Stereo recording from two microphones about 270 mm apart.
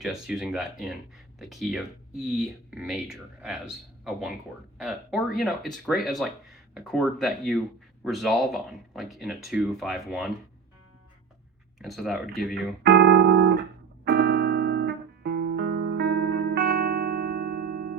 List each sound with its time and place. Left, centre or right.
0.0 s speech: centre
11.8 s speech: centre
12.8 s music: right